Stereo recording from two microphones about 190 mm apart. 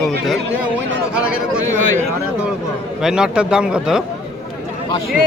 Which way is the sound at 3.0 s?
5° right (ahead or behind).